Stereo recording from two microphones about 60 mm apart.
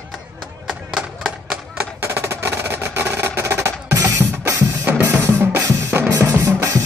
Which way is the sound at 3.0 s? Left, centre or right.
Right.